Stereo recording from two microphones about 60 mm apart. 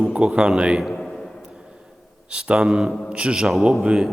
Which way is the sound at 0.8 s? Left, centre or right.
Centre.